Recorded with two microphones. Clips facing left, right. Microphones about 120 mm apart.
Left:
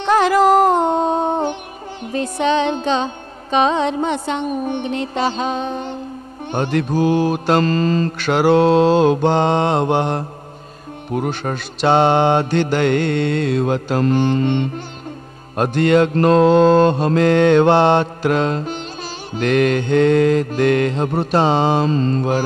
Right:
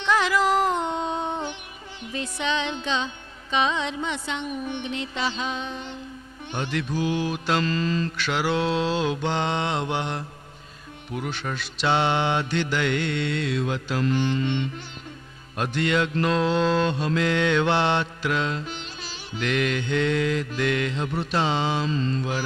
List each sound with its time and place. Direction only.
0.0 s music: 45° left (ahead or behind)
2.1 s mantra: 45° left (ahead or behind)